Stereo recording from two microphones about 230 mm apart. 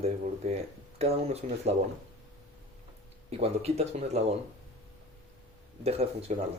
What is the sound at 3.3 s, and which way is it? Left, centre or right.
Speech, right.